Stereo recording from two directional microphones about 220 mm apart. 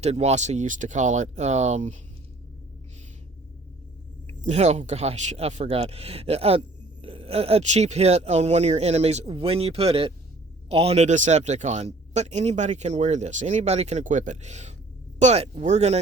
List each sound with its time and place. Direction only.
0.0 s speech: 30° right (ahead or behind)
4.3 s speech: 30° right (ahead or behind)